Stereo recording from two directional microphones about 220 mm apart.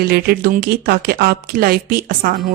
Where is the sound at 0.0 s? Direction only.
45° right (ahead or behind).